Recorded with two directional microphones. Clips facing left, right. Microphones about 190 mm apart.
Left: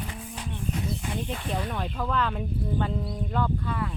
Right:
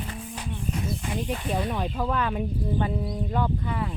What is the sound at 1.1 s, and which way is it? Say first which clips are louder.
Speech: right 6 dB; 15° right (ahead or behind).